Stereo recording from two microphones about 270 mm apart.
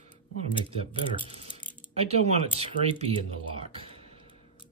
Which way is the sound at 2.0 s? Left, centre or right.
Right.